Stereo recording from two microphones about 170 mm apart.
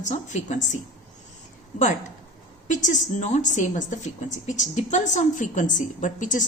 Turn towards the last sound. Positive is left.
turn(degrees=50)  # may be behind; listen again after turning